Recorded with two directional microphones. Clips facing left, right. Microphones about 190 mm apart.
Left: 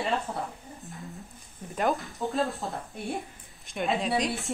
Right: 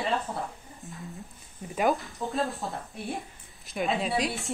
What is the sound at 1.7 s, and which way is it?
Speech, centre (ahead or behind).